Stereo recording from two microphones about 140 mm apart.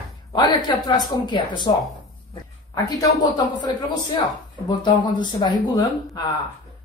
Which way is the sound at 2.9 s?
30° left (ahead or behind).